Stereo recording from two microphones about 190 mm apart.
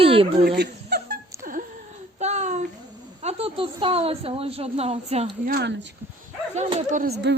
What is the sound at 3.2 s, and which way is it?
A woman's voice, 30° right (ahead or behind).